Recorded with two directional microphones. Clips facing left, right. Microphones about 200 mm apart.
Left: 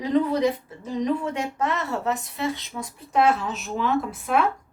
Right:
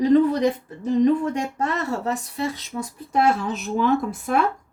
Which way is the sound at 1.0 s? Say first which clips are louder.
Right 4 dB; 40° right (ahead or behind).